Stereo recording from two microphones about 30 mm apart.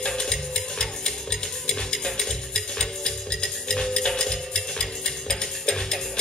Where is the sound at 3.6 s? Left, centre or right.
Left.